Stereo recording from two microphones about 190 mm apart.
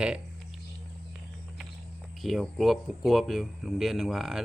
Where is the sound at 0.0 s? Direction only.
5° right (ahead or behind).